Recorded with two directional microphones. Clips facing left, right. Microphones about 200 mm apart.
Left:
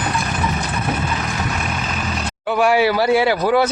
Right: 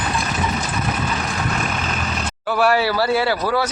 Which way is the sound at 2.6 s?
15° left (ahead or behind).